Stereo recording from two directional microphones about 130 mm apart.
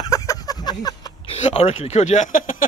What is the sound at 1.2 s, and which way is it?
Speech, 50° left (ahead or behind).